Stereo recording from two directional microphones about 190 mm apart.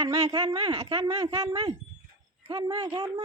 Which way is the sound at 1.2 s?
20° right (ahead or behind).